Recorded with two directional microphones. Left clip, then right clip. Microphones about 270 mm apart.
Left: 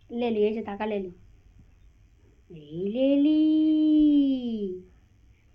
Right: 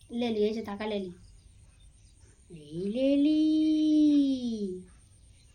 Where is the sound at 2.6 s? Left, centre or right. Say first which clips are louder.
Left 4 dB; centre.